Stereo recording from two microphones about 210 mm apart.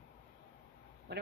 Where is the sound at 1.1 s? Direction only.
55° right (ahead or behind).